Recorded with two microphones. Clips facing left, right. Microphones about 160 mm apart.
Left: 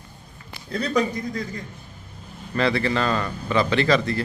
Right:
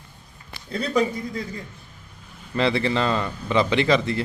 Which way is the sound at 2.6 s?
25° right (ahead or behind).